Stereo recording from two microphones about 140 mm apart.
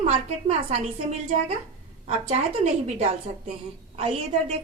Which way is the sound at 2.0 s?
50° right (ahead or behind).